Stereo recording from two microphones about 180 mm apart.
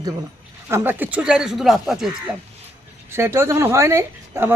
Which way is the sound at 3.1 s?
15° right (ahead or behind).